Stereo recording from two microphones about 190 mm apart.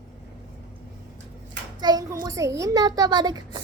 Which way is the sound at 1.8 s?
20° right (ahead or behind).